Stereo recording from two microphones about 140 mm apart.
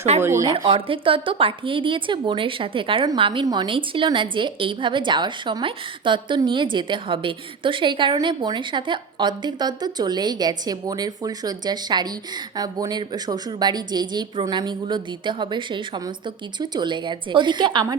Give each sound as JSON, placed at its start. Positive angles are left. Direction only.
{"t": 0.2, "sound": "speech", "side_deg": -20}
{"t": 0.5, "sound": "a woman's voice", "side_deg": -45}